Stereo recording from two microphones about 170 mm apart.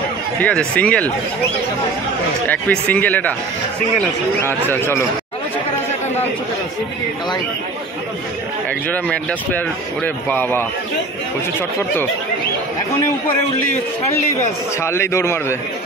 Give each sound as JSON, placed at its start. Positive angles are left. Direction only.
{"t": 0.4, "sound": "speech", "side_deg": 5}
{"t": 2.4, "sound": "speech", "side_deg": 10}
{"t": 4.4, "sound": "speech", "side_deg": 10}
{"t": 8.9, "sound": "speech", "side_deg": 10}
{"t": 14.8, "sound": "speech", "side_deg": 15}